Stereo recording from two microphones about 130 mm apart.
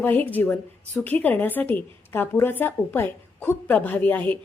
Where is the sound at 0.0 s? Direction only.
15° left (ahead or behind).